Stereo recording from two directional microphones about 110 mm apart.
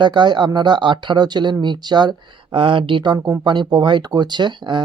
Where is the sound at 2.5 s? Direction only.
50° right (ahead or behind).